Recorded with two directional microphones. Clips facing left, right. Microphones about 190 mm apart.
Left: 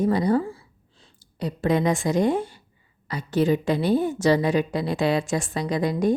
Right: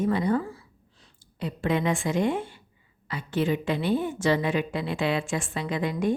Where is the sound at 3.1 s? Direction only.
40° left (ahead or behind).